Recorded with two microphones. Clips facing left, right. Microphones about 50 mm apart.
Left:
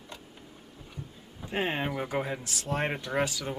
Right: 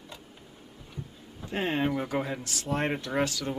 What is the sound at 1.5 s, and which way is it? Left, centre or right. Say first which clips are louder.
Speech: right 2 dB; centre.